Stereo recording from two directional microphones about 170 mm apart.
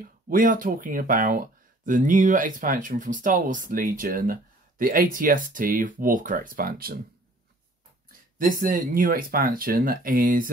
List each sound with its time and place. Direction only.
0.0 s speech: 55° right (ahead or behind)
8.4 s speech: 55° right (ahead or behind)